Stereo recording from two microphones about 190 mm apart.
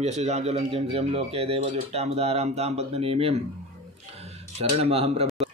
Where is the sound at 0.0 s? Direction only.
35° right (ahead or behind).